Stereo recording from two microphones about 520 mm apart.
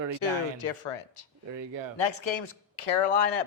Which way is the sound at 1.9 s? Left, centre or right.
Left.